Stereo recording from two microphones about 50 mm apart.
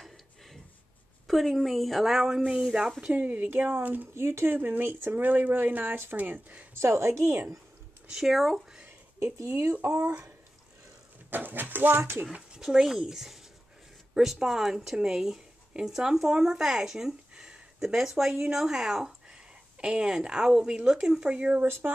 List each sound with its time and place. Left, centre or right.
1.2 s speech: centre; by 3.3 s right
3.3 s speech: right
4.1 s speech: right
4.5 s speech: right
6.7 s a woman's voice: right
8.1 s speech: centre
9.2 s speech: right
11.2 s speech: right
12.5 s speech: centre